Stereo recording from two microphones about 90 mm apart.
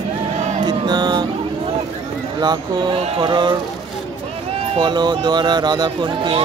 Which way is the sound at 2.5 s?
70° right (ahead or behind).